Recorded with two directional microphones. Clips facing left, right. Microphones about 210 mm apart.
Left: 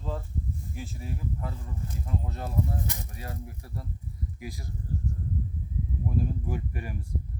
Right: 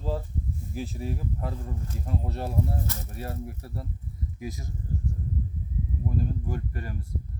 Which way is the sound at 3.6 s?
30° right (ahead or behind).